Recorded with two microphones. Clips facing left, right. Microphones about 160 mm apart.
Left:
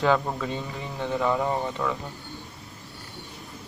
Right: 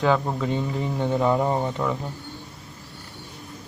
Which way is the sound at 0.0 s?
Centre (ahead or behind).